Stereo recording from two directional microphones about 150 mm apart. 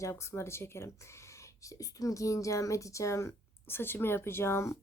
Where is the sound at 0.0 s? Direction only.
20° left (ahead or behind).